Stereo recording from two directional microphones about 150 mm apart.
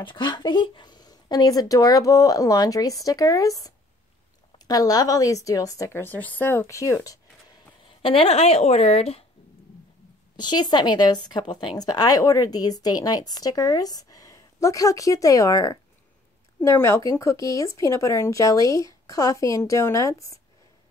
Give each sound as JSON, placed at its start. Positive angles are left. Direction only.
{"t": 0.0, "sound": "speech", "side_deg": 30}
{"t": 8.0, "sound": "speech", "side_deg": 40}
{"t": 10.3, "sound": "speech", "side_deg": 30}